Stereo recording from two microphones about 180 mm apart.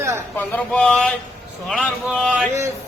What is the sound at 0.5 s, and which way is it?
A man's voice, 5° left (ahead or behind).